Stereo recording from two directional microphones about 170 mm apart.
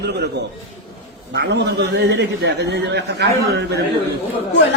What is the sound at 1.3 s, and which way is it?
A man's voice, 90° right.